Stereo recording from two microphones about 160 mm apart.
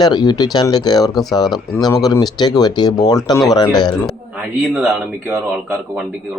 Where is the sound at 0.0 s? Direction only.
25° left (ahead or behind).